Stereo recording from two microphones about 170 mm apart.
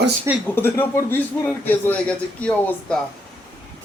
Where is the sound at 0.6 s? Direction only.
10° left (ahead or behind).